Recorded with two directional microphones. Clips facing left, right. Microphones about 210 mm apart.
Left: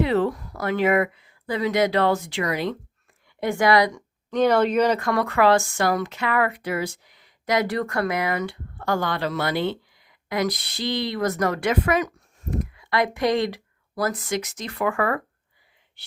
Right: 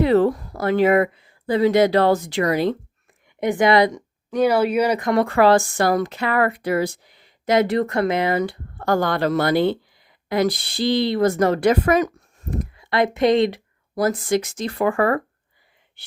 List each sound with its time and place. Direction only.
0.0 s speech: 40° right (ahead or behind)
3.4 s speech: 20° right (ahead or behind)
4.3 s speech: 10° right (ahead or behind); by 12.5 s 40° right (ahead or behind)
12.7 s a sound: 25° right (ahead or behind)
13.1 s speech: 25° right (ahead or behind)